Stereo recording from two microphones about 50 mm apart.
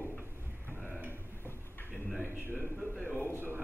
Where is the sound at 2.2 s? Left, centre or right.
Right.